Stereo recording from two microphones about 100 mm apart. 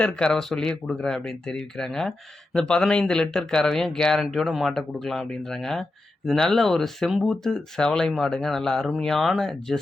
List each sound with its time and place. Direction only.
0.0 s speech: 5° left (ahead or behind)